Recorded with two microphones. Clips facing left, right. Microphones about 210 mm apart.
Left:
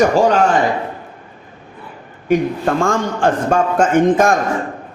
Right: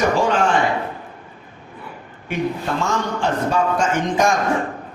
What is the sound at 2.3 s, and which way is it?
A man's voice, 50° left (ahead or behind).